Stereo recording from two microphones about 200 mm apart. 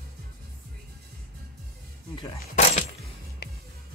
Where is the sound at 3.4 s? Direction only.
55° left (ahead or behind).